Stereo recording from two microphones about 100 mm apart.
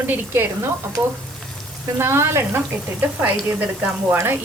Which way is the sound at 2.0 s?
25° right (ahead or behind).